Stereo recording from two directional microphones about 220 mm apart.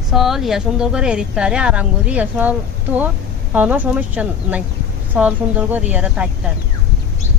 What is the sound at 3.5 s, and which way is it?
Speech, 5° right (ahead or behind).